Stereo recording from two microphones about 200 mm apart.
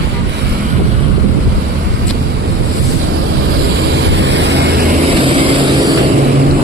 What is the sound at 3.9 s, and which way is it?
Vehicle, 60° right (ahead or behind).